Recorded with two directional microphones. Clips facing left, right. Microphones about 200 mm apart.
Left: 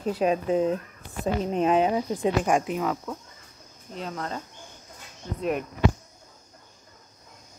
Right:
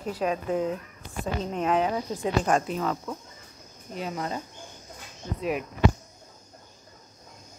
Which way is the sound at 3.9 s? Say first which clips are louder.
Right 1 dB; 10° right (ahead or behind).